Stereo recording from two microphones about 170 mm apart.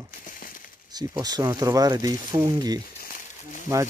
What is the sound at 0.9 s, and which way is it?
Speech, 20° right (ahead or behind).